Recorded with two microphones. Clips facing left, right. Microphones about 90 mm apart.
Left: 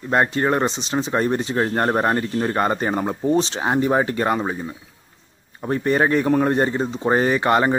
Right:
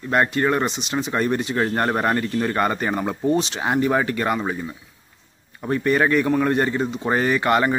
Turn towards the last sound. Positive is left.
turn(degrees=30)  # may be behind; listen again after turning